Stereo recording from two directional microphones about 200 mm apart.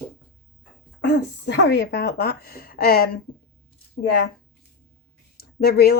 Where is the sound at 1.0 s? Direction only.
60° left (ahead or behind).